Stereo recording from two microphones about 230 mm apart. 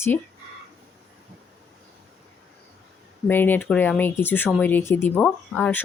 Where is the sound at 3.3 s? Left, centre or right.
Centre.